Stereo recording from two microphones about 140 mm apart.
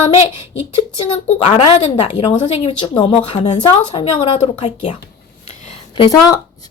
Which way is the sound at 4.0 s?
40° left (ahead or behind).